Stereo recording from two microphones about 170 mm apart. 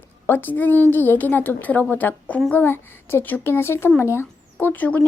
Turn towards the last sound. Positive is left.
turn(degrees=10)  # may be behind; listen again after turning